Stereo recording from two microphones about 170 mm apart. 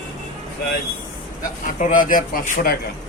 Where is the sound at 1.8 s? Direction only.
50° left (ahead or behind).